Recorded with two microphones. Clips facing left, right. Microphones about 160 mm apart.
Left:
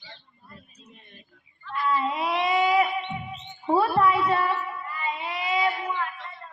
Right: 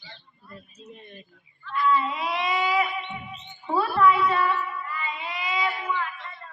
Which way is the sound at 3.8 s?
35° left (ahead or behind).